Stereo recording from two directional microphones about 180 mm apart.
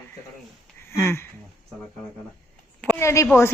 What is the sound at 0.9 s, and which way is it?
Speech, 15° left (ahead or behind).